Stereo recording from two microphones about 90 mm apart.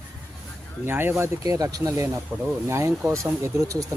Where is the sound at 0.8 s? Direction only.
25° right (ahead or behind).